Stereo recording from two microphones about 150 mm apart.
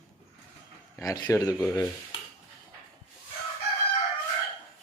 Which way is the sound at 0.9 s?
25° left (ahead or behind).